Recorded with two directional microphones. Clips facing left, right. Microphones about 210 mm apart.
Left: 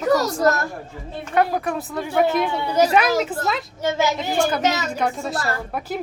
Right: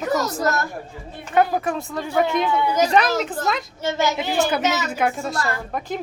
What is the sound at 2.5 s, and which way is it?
Speech, 30° left (ahead or behind).